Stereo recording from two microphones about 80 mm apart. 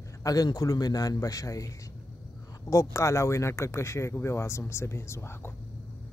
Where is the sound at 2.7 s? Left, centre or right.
Left.